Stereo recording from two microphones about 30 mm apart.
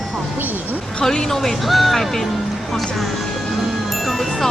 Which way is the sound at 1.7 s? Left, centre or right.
Centre.